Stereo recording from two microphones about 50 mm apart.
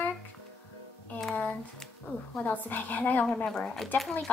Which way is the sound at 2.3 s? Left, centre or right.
Left.